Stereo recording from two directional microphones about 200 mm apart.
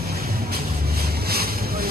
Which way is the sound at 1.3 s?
50° right (ahead or behind).